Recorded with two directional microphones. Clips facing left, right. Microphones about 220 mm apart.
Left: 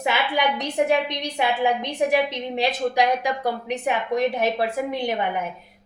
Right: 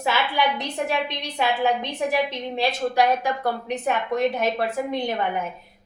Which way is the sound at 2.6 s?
15° left (ahead or behind).